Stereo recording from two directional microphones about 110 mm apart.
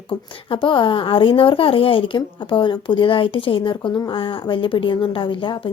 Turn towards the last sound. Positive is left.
turn(degrees=50)  # may be behind; listen again after turning